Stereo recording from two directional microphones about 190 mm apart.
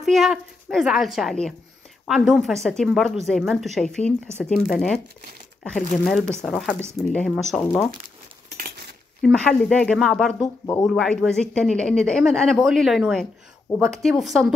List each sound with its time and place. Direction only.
0.0 s a woman's voice: centre (ahead or behind)
8.5 s chink: 50° right (ahead or behind)
9.2 s a woman's voice: centre (ahead or behind)
10.4 s speech: 20° left (ahead or behind)
10.9 s a woman's voice: centre (ahead or behind)